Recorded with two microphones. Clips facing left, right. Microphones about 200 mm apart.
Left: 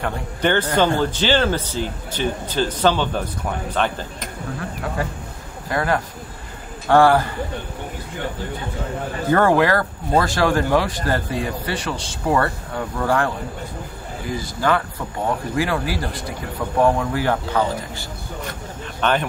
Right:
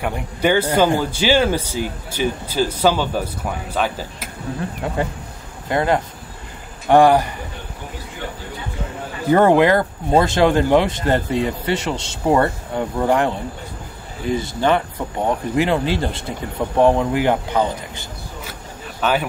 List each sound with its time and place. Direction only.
0.0 s speech: 10° right (ahead or behind)
4.8 s speech: 25° right (ahead or behind)
9.3 s speech: 20° right (ahead or behind)
18.4 s zipper: 5° right (ahead or behind)